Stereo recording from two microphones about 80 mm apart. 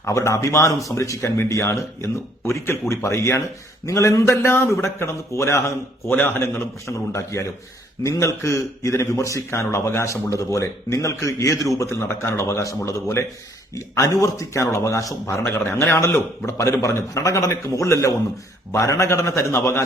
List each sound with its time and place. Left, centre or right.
0.0 s a man's voice: left
6.1 s a man's voice: left
15.4 s a man's voice: left